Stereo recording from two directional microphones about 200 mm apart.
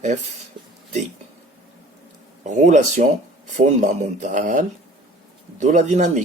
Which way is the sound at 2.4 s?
35° right (ahead or behind).